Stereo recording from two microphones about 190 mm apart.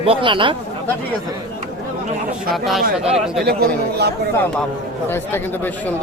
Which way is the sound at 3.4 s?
55° right (ahead or behind).